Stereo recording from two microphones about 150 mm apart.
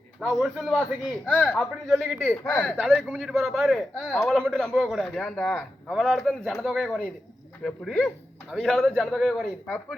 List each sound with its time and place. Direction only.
0.2 s speech: 5° right (ahead or behind)
1.2 s speech: 10° left (ahead or behind)
2.0 s speech: 15° right (ahead or behind)
2.3 s speech: 10° left (ahead or behind)